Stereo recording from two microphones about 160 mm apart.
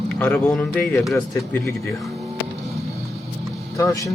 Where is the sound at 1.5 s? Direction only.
15° left (ahead or behind).